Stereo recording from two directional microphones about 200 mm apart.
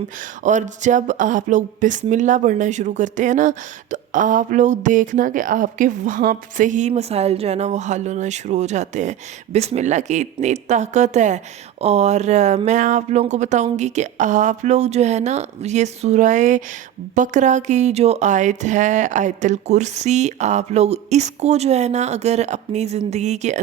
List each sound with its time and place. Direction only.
0.4 s speech: 35° right (ahead or behind)